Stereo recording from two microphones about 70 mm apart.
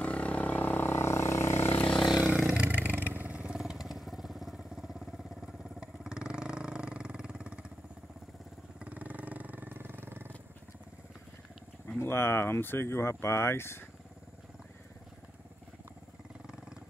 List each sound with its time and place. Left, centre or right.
0.0 s vehicle: centre; by 1.7 s left
2.2 s vehicle: centre
3.3 s vehicle: centre
8.7 s vehicle: right
12.0 s speech: left